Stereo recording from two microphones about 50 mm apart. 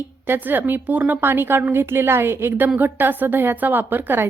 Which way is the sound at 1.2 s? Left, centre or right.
Right.